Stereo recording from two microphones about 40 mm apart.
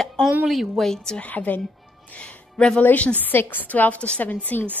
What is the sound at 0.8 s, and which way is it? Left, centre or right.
Speech, centre.